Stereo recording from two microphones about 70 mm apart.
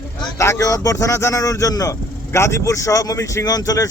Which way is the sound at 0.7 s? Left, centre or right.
Left.